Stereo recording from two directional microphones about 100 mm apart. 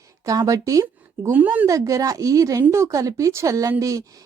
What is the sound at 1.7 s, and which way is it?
A woman's voice, 35° right (ahead or behind).